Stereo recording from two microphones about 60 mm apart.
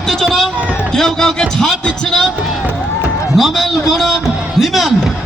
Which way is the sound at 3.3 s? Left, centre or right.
Centre.